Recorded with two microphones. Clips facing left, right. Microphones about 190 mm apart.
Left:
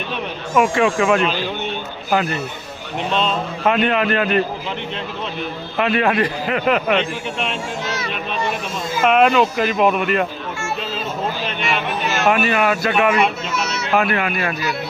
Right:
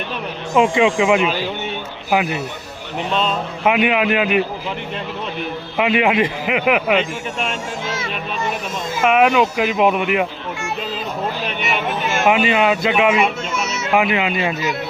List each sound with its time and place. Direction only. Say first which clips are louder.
0.5 s speech: right 2 dB; 20° right (ahead or behind)
5.7 s speech: right 1 dB; 15° right (ahead or behind)
7.9 s speech: even; 25° right (ahead or behind)
9.0 s speech: even; 10° right (ahead or behind)
12.2 s speech: right 2 dB; 15° right (ahead or behind)
13.1 s a sound: even; 5° right (ahead or behind)
13.9 s speech: right 1 dB; 15° right (ahead or behind)